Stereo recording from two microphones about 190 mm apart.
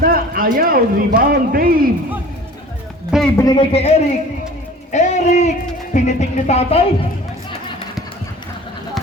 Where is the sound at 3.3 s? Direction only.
20° left (ahead or behind).